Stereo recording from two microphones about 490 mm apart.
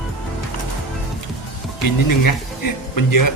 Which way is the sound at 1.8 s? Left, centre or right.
Left.